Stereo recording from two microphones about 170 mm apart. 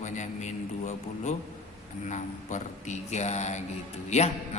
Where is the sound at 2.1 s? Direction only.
45° left (ahead or behind).